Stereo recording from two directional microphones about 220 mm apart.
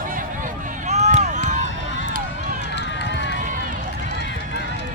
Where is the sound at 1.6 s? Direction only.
55° left (ahead or behind).